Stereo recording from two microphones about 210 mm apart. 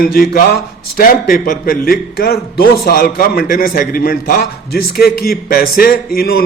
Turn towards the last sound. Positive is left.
turn(degrees=45)  # may be behind; listen again after turning